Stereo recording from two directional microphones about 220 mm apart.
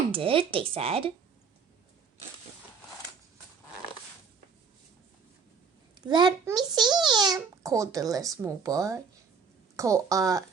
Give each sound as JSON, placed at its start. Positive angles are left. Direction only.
{"t": 0.1, "sound": "speech", "side_deg": -25}
{"t": 6.1, "sound": "a child's voice", "side_deg": -20}